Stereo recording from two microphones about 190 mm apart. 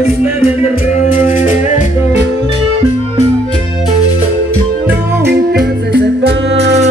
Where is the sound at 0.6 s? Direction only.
40° left (ahead or behind).